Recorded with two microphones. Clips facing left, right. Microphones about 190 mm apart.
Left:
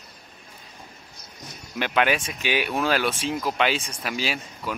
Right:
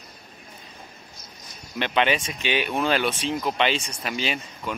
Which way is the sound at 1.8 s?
5° left (ahead or behind).